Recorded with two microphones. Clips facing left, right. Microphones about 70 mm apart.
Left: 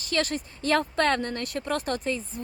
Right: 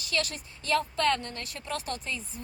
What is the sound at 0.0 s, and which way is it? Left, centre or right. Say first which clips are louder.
Speech: left 5 dB; left.